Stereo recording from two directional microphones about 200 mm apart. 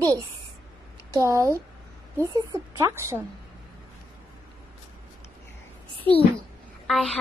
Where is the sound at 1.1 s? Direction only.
15° right (ahead or behind).